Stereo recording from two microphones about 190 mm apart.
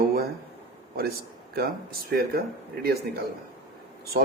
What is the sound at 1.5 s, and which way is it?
Speech, 55° right (ahead or behind).